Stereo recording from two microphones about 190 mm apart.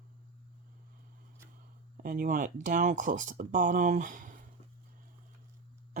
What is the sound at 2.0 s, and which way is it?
Speech, 50° right (ahead or behind).